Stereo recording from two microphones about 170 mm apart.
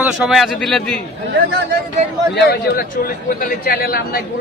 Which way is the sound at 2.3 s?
65° left (ahead or behind).